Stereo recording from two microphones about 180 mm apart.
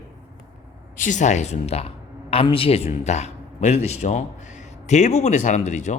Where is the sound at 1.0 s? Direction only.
45° left (ahead or behind).